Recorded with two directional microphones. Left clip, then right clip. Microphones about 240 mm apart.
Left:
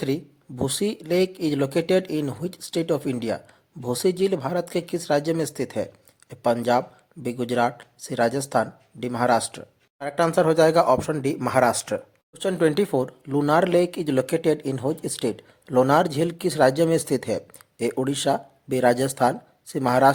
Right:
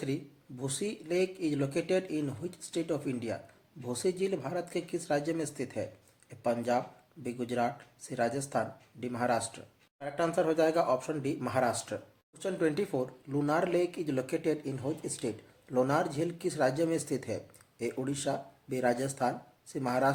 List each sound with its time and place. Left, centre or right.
0.0 s speech: left